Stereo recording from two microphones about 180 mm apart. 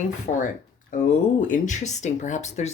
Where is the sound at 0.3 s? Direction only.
40° left (ahead or behind).